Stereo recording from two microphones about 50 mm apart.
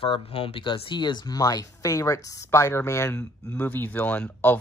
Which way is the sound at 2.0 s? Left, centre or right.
Left.